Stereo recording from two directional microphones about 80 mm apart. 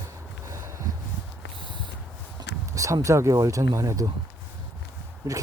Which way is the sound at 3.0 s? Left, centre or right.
Right.